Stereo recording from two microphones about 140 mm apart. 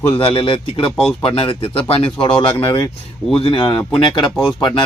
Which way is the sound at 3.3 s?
40° left (ahead or behind).